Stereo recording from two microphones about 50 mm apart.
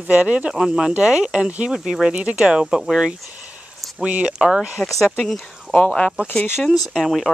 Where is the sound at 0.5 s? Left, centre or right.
Centre.